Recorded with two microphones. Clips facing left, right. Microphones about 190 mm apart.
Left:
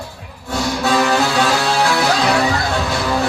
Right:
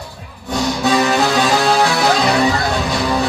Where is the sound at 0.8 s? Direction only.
15° right (ahead or behind).